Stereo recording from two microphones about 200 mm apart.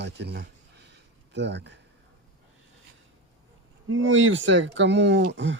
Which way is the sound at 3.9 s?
85° right.